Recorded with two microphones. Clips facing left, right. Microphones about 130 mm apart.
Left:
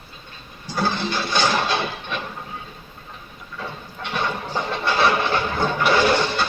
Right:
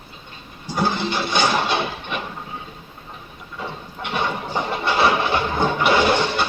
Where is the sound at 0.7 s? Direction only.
15° right (ahead or behind).